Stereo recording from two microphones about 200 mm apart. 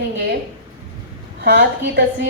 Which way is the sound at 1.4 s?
55° right (ahead or behind).